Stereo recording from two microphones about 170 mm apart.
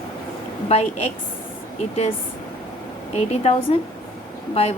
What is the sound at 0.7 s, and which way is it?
A woman's voice, 35° left (ahead or behind).